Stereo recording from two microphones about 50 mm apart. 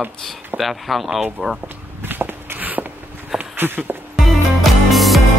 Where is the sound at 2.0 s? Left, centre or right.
Right.